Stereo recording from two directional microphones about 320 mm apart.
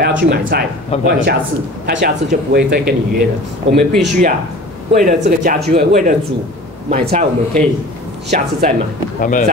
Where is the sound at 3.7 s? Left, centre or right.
Centre.